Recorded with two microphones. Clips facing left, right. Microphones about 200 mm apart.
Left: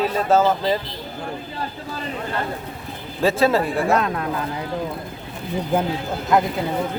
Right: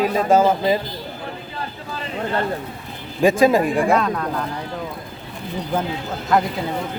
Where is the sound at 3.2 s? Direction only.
15° right (ahead or behind).